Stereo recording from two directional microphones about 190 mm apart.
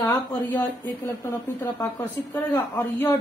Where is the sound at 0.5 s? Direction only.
10° left (ahead or behind).